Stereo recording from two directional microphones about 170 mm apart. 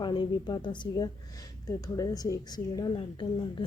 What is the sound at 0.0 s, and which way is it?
Speech, 25° left (ahead or behind).